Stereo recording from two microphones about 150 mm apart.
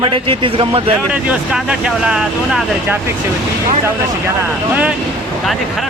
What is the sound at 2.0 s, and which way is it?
Speech, 5° right (ahead or behind).